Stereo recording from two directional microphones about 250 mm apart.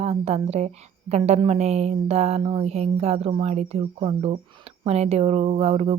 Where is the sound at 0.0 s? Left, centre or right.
Right.